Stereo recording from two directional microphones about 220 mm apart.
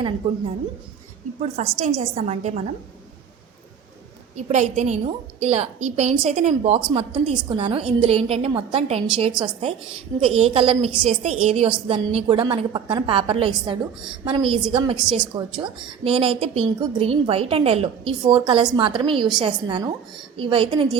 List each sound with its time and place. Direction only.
0.2 s a woman's voice: 30° right (ahead or behind)
4.4 s a woman's voice: 30° right (ahead or behind)